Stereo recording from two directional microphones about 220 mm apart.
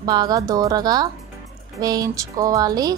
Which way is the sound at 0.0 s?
20° right (ahead or behind).